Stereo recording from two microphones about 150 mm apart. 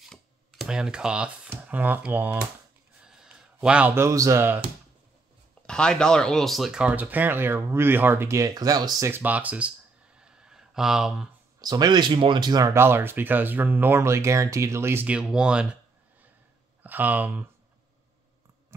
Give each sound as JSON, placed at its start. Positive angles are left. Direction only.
{"t": 0.1, "sound": "speech", "side_deg": 0}
{"t": 5.7, "sound": "speech", "side_deg": 5}
{"t": 9.1, "sound": "speech", "side_deg": -10}
{"t": 10.1, "sound": "a sound", "side_deg": -5}
{"t": 11.6, "sound": "speech", "side_deg": -25}
{"t": 18.7, "sound": "a sound", "side_deg": -15}